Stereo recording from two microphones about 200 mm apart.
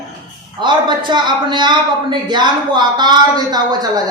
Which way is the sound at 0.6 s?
25° right (ahead or behind).